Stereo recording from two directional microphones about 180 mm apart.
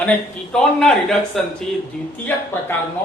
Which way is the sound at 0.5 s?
5° left (ahead or behind).